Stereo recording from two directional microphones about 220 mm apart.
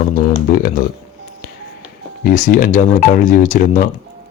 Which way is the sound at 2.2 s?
40° left (ahead or behind).